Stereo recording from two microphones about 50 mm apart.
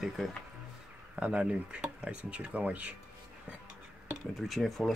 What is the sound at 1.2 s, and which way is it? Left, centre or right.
Speech, right.